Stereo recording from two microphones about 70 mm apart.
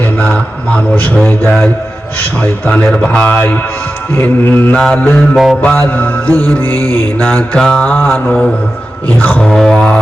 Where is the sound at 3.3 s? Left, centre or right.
Left.